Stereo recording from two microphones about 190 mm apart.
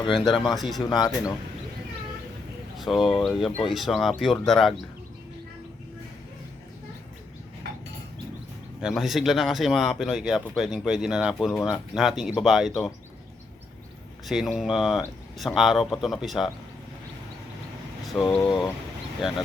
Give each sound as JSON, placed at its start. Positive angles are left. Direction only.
{"t": 0.4, "sound": "speech", "side_deg": 0}
{"t": 0.9, "sound": "speech", "side_deg": 20}
{"t": 2.7, "sound": "speech", "side_deg": 0}
{"t": 8.8, "sound": "speech", "side_deg": 0}
{"t": 14.3, "sound": "speech", "side_deg": 0}
{"t": 18.1, "sound": "speech", "side_deg": 0}